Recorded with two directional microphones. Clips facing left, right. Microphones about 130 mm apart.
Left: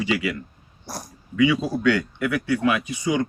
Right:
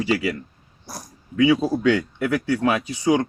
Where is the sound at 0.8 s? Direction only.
70° left (ahead or behind).